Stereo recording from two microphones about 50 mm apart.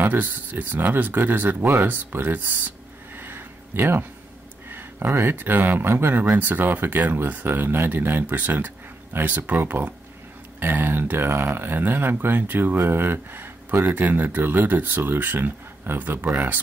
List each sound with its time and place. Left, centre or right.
0.0 s speech: right
3.2 s a sound: right
4.6 s speech: right